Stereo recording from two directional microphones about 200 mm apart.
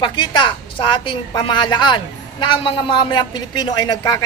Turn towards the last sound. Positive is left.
turn(degrees=20)  # may be behind; listen again after turning